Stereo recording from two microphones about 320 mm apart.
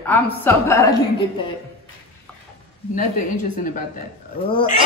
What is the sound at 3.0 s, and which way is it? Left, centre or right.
A woman's voice, left.